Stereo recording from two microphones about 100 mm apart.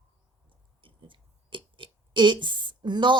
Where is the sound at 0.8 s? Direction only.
55° right (ahead or behind).